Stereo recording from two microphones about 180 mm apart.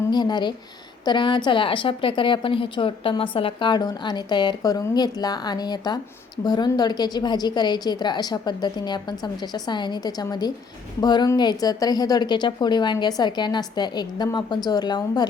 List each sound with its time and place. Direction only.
0.1 s a woman's voice: 25° left (ahead or behind)